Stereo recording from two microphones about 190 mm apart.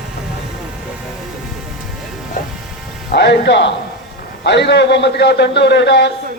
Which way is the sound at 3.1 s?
60° left (ahead or behind).